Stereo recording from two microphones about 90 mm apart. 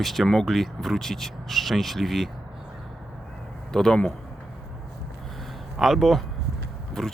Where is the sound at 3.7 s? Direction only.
10° left (ahead or behind).